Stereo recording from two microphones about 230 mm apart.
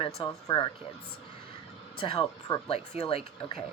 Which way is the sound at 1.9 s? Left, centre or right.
Left.